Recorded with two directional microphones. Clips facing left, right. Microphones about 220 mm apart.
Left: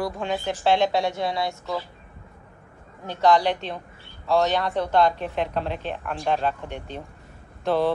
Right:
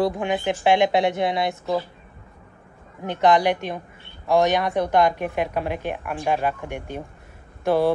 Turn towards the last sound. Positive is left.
turn(degrees=-10)  # may be behind; listen again after turning